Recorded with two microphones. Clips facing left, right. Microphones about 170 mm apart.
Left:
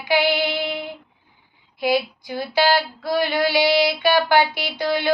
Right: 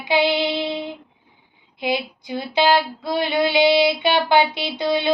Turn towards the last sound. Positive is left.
turn(degrees=-20)  # may be behind; listen again after turning